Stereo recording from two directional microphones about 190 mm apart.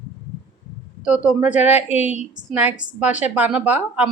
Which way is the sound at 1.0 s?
5° right (ahead or behind).